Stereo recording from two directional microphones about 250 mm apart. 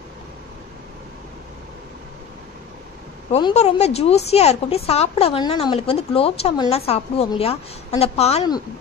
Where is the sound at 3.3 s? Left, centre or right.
Left.